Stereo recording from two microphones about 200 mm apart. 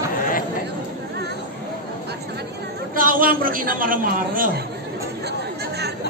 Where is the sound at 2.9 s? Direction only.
45° right (ahead or behind).